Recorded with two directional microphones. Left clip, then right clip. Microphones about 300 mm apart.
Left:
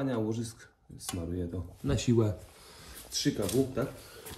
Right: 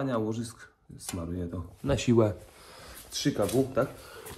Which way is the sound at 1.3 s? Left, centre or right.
Right.